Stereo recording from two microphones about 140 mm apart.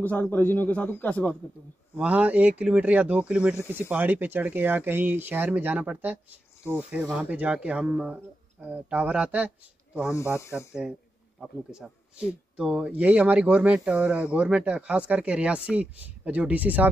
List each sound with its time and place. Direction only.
0.0 s a man's voice: 10° left (ahead or behind)
2.0 s speech: 10° right (ahead or behind)
7.2 s speech: 10° right (ahead or behind)
10.0 s speech: 20° left (ahead or behind)
10.7 s speech: 5° right (ahead or behind)